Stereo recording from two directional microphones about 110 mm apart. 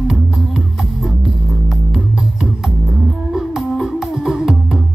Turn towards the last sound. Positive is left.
turn(degrees=-5)  # may be behind; listen again after turning